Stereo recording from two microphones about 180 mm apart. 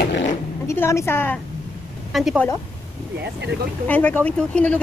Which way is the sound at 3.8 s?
10° left (ahead or behind).